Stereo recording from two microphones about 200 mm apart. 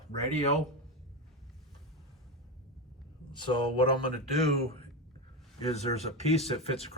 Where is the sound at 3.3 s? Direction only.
25° left (ahead or behind).